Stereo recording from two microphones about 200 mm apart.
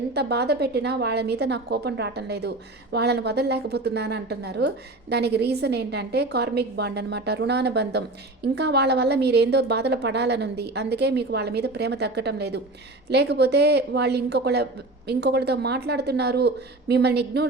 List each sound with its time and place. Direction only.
0.1 s a woman's voice: 55° right (ahead or behind)